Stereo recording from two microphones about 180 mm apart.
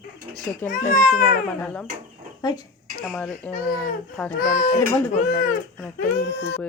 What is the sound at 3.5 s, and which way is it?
Speech, 50° left (ahead or behind).